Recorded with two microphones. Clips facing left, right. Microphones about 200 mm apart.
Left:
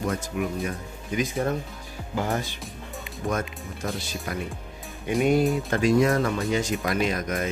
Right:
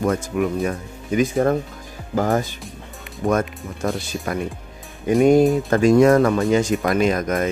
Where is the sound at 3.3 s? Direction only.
70° right (ahead or behind).